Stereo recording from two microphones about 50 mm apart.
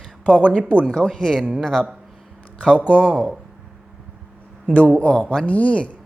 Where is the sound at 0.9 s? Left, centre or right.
Centre.